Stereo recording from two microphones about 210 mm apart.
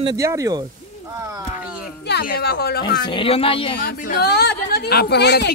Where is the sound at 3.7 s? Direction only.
50° left (ahead or behind).